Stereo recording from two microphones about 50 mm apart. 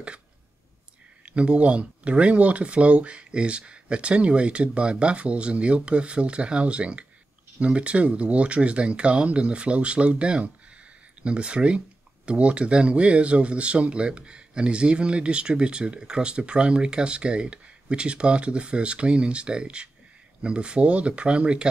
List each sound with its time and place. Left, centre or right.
1.2 s speech: right